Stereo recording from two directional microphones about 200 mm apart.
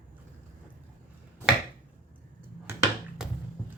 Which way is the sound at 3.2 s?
5° right (ahead or behind).